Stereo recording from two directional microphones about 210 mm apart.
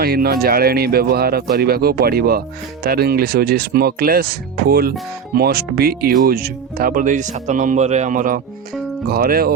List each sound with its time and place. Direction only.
0.0 s speech: 45° right (ahead or behind)